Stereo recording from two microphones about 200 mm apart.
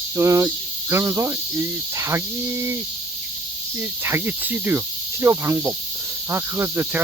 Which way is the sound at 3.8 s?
10° right (ahead or behind).